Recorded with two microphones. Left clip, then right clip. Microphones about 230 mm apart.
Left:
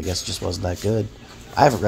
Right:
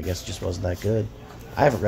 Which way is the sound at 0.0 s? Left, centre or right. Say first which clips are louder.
Left 4 dB; centre.